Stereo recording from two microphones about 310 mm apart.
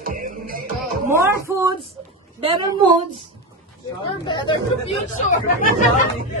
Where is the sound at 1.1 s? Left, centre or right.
Centre.